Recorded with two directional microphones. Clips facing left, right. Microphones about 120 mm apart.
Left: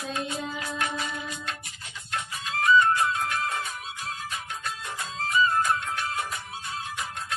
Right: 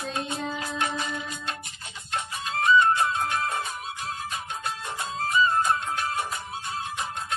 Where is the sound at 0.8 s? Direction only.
25° right (ahead or behind).